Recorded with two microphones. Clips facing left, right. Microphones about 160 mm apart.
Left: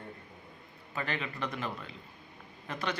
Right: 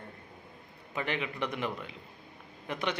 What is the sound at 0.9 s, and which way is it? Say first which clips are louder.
A man's voice: right 2 dB; 15° right (ahead or behind).